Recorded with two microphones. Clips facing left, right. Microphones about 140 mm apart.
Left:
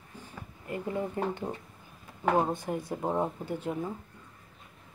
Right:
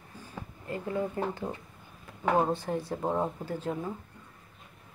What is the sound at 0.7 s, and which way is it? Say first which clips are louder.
Speech: right 1 dB; 20° left (ahead or behind).